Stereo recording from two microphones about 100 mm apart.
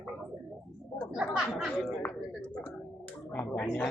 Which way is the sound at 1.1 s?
5° right (ahead or behind).